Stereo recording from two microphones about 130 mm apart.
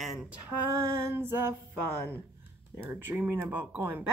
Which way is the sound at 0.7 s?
20° right (ahead or behind).